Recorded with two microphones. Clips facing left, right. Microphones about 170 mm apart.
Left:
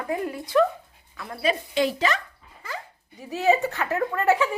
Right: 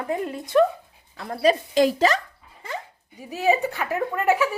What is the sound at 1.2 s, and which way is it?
Speech, 40° right (ahead or behind).